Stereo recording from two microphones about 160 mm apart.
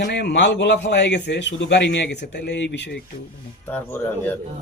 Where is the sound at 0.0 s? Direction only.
90° left.